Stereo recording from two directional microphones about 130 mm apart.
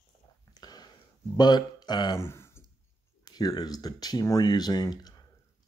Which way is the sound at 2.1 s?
20° left (ahead or behind).